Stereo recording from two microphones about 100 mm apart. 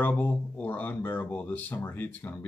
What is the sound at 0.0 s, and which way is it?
Speech, 15° left (ahead or behind).